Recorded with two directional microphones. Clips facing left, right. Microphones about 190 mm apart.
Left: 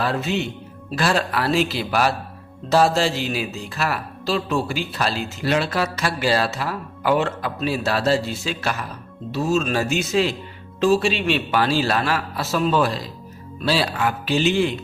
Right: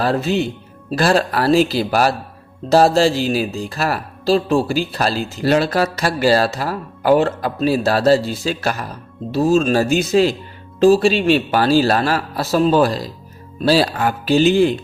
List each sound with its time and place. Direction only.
0.0 s speech: 40° right (ahead or behind)